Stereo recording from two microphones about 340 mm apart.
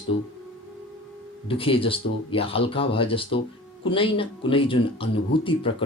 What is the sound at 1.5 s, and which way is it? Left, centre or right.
Speech, centre.